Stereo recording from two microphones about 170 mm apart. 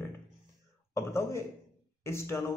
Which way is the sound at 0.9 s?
15° left (ahead or behind).